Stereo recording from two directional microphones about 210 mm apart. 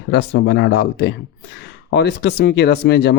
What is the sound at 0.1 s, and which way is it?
Speech, 55° left (ahead or behind).